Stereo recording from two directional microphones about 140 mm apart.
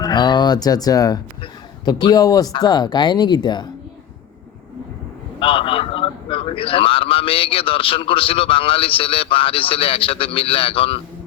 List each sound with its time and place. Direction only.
0.0 s a man's voice: 30° left (ahead or behind)
5.4 s a man's voice: 40° left (ahead or behind)